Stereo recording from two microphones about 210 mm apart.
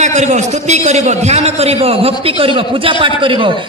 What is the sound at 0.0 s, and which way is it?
A man's voice, 35° right (ahead or behind).